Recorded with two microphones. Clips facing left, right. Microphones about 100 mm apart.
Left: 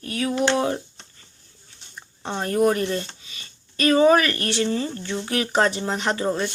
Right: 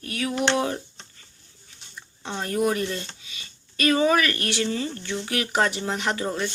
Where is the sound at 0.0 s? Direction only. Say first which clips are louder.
Left 3 dB; 30° left (ahead or behind).